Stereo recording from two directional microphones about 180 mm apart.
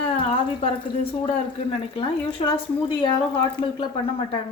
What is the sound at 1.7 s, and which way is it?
A woman's voice, 30° left (ahead or behind).